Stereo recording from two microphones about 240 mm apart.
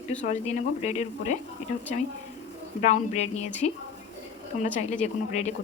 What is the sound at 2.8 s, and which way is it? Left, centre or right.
Speech, left.